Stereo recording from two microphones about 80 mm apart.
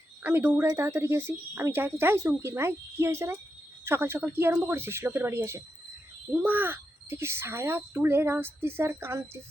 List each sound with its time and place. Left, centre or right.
0.2 s speech: right